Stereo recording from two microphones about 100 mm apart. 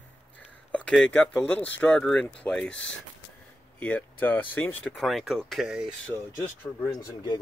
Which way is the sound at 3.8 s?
15° left (ahead or behind).